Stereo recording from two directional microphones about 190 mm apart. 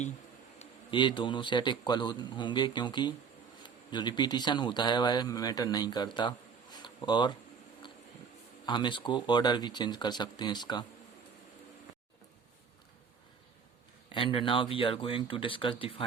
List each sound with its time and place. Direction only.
0.6 s a man's voice: 25° left (ahead or behind)
8.6 s a man's voice: 25° left (ahead or behind)
14.1 s a man's voice: 25° left (ahead or behind)